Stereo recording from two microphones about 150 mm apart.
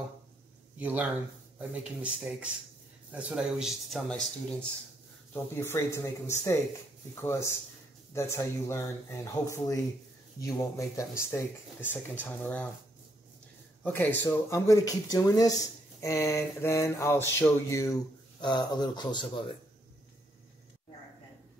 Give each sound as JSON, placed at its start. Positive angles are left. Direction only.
{"t": 0.7, "sound": "speech", "side_deg": -10}
{"t": 4.1, "sound": "speech", "side_deg": 10}
{"t": 13.8, "sound": "speech", "side_deg": 10}